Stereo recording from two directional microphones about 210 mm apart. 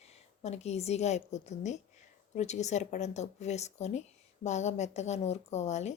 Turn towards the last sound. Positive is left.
turn(degrees=30)  # may be behind; listen again after turning